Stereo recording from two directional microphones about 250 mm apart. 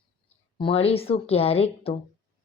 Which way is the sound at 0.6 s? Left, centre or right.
Left.